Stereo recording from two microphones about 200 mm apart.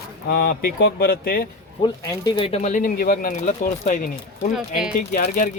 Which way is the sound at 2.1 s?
25° left (ahead or behind).